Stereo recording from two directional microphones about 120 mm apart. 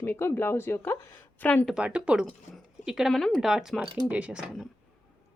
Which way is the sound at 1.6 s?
5° right (ahead or behind).